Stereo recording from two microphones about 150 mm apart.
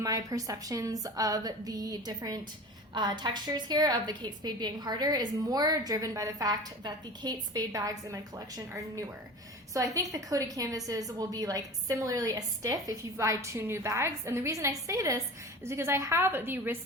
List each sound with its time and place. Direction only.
0.0 s a woman's voice: 25° right (ahead or behind)